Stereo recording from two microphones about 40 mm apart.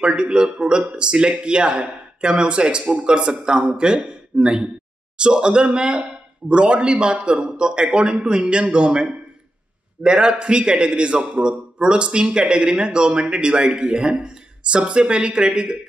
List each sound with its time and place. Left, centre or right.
0.0 s a man's voice: right